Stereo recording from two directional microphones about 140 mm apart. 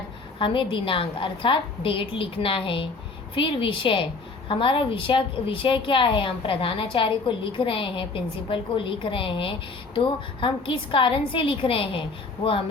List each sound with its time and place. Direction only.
0.3 s a woman's voice: 35° left (ahead or behind)